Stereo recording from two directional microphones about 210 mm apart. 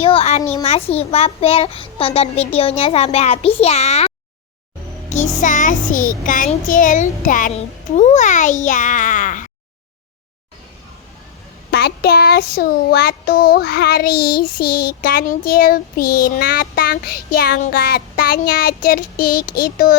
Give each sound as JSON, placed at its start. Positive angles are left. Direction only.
{"t": 0.0, "sound": "a child's voice", "side_deg": 25}
{"t": 5.0, "sound": "child singing", "side_deg": 35}
{"t": 11.7, "sound": "child singing", "side_deg": 50}